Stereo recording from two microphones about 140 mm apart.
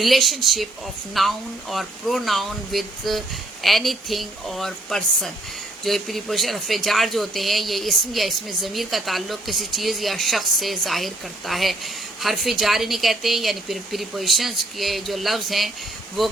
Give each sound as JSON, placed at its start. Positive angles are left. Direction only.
{"t": 0.0, "sound": "speech", "side_deg": 0}